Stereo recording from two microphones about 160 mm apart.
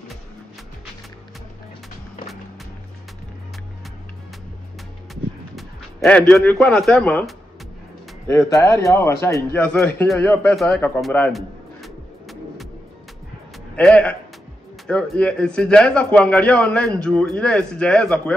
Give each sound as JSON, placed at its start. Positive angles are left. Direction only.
{"t": 5.1, "sound": "a sound", "side_deg": 0}
{"t": 8.5, "sound": "speech", "side_deg": 20}
{"t": 9.6, "sound": "a man's voice", "side_deg": 5}
{"t": 10.5, "sound": "a man's voice", "side_deg": 0}
{"t": 11.3, "sound": "music", "side_deg": 0}
{"t": 13.7, "sound": "a man's voice", "side_deg": 5}